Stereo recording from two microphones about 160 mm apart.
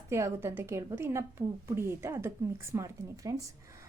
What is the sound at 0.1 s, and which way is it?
A woman's voice, 15° right (ahead or behind).